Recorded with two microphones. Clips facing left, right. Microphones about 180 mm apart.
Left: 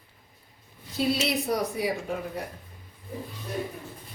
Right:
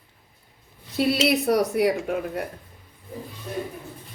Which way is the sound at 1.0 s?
70° right (ahead or behind).